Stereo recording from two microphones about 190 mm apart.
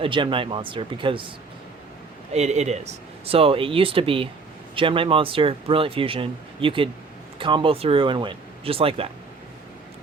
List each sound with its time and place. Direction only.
0.0 s speech: 25° right (ahead or behind)
2.3 s speech: 35° right (ahead or behind)